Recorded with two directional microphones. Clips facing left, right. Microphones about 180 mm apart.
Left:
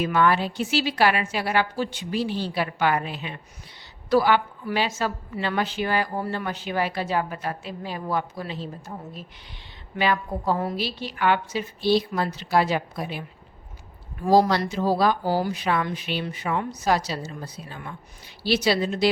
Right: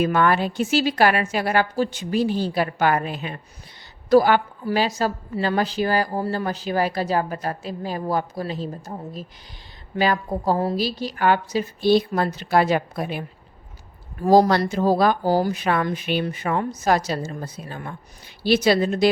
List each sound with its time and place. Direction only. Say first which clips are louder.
0.0 s a woman's voice: right 2 dB; 50° right (ahead or behind)